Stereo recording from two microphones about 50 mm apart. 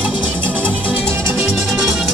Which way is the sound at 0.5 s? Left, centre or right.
Right.